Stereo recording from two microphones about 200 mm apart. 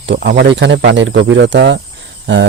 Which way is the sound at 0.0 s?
60° right (ahead or behind).